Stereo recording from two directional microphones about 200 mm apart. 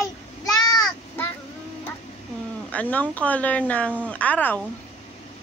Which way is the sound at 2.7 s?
5° left (ahead or behind).